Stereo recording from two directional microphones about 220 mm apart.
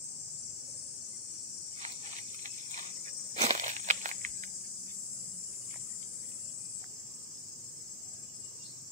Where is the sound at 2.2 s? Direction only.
35° right (ahead or behind).